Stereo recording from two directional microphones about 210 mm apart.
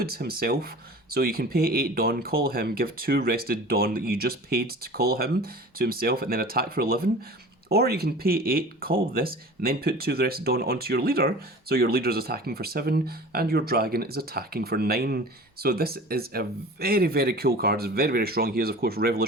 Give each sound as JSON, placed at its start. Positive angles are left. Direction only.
{"t": 0.0, "sound": "speech", "side_deg": -45}